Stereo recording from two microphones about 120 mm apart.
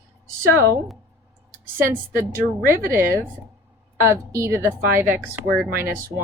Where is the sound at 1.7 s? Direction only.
20° right (ahead or behind).